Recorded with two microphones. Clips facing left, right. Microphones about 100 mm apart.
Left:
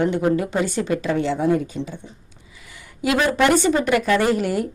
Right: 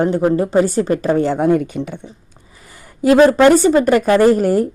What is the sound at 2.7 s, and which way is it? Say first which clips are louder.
Speech: right 10 dB; 40° right (ahead or behind).